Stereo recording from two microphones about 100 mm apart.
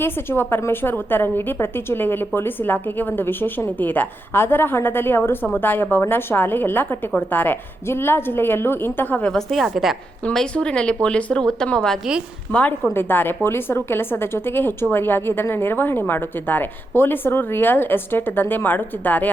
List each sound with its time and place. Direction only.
0.0 s a woman's voice: 25° left (ahead or behind)
9.3 s a woman's voice: centre (ahead or behind)
10.2 s speech: 10° left (ahead or behind)
12.9 s a woman's voice: 20° left (ahead or behind)